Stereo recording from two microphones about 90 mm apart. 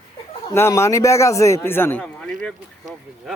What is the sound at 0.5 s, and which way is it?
A man's voice, 30° left (ahead or behind).